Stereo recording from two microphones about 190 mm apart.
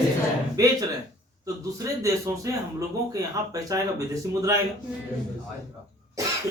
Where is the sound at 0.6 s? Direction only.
20° right (ahead or behind).